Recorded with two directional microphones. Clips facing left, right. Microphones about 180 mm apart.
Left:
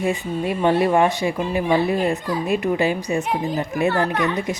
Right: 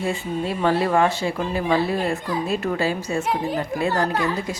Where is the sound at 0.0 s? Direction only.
15° left (ahead or behind).